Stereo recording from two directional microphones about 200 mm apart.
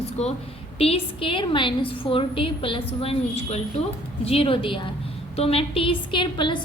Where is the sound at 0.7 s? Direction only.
30° left (ahead or behind).